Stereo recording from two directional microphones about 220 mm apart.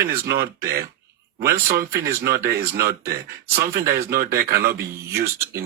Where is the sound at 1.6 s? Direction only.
45° right (ahead or behind).